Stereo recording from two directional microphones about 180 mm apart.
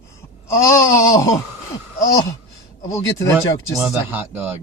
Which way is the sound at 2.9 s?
15° left (ahead or behind).